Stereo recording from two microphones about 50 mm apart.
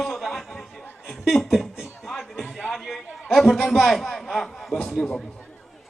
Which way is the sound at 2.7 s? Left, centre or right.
Centre.